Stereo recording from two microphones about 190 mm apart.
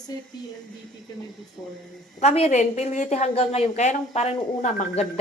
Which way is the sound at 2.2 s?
35° left (ahead or behind).